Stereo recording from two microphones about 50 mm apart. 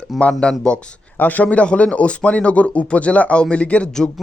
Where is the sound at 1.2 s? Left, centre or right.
Left.